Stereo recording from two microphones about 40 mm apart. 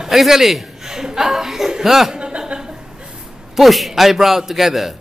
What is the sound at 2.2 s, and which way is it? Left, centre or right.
Chuckle, right.